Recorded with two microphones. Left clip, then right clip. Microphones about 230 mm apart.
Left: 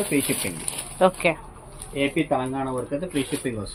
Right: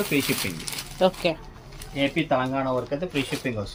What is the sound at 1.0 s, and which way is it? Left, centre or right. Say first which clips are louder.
Speech: left 3 dB; centre.